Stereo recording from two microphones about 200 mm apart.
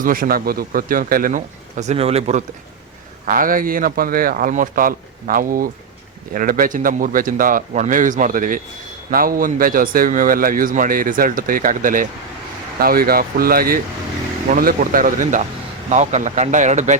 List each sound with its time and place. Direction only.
0.0 s speech: 45° right (ahead or behind)
3.2 s speech: 45° right (ahead or behind)